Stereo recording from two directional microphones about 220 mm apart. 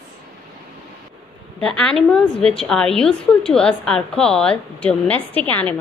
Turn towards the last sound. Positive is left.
turn(degrees=5)  # may be behind; listen again after turning